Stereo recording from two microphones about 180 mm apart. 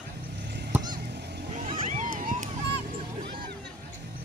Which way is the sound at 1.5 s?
45° right (ahead or behind).